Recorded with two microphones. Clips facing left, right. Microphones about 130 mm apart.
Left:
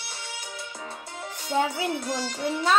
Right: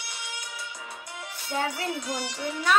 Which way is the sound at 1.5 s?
20° left (ahead or behind).